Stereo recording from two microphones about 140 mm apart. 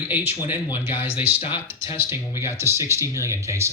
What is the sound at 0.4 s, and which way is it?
Speech, 15° right (ahead or behind).